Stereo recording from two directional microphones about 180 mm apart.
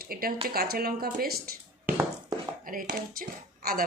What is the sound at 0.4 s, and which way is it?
Speech, 60° right (ahead or behind).